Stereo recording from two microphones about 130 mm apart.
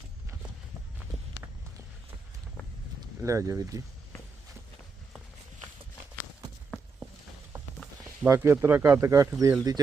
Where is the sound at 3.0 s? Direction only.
25° right (ahead or behind).